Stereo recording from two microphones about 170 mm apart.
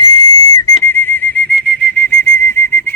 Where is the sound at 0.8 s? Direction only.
10° left (ahead or behind).